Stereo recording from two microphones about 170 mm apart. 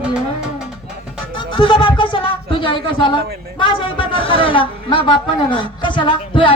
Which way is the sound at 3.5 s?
30° left (ahead or behind).